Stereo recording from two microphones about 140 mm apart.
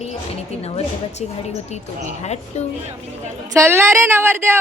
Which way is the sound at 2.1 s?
55° left (ahead or behind).